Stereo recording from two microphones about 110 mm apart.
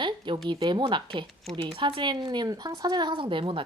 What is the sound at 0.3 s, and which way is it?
Speech, 45° right (ahead or behind).